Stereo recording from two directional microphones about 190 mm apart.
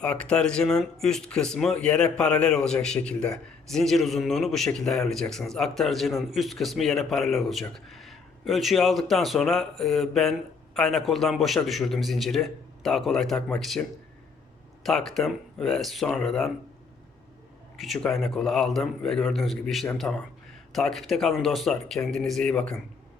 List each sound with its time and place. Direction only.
0.0 s speech: 5° left (ahead or behind)
14.8 s speech: centre (ahead or behind)
17.7 s speech: centre (ahead or behind)